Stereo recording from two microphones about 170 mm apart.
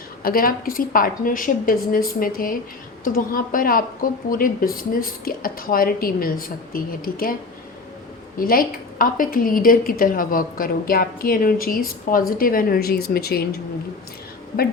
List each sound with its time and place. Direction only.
0.2 s a woman's voice: 60° left (ahead or behind)
8.4 s a woman's voice: 55° left (ahead or behind)